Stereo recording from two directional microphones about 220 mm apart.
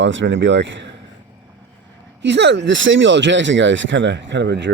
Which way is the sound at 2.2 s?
50° right (ahead or behind).